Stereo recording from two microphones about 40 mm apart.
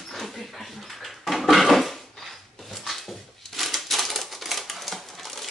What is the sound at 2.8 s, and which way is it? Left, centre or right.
Typewriter, centre.